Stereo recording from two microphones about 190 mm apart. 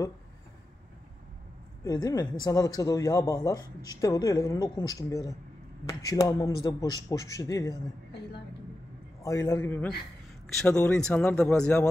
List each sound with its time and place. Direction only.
1.9 s a man's voice: 20° left (ahead or behind)
9.2 s a man's voice: 15° left (ahead or behind)